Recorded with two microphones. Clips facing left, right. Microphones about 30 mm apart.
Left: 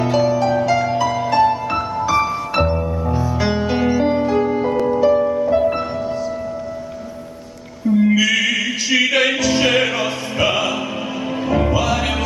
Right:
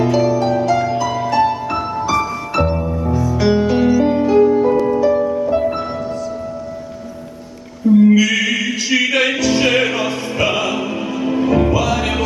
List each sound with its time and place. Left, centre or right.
0.0 s music: centre
2.0 s music: centre
3.3 s music: centre
4.7 s harp: centre
5.0 s harp: centre
8.0 s music: centre